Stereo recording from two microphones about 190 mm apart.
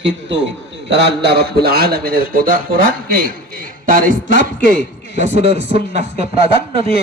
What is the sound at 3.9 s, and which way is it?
Music, 45° right (ahead or behind).